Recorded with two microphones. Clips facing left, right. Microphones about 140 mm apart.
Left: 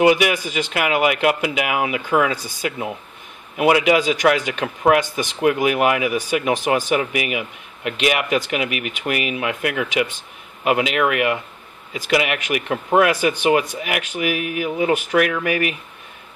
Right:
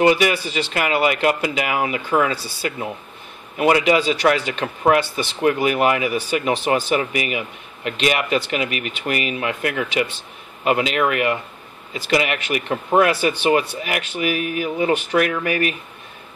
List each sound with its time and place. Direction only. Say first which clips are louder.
0.0 s speech: left 1 dB; 10° left (ahead or behind)